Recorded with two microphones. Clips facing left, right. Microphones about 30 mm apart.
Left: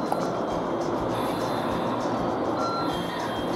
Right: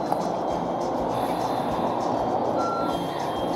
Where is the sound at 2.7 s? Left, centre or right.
Centre.